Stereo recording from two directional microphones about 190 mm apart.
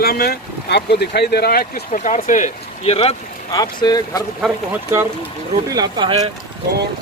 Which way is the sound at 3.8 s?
20° left (ahead or behind).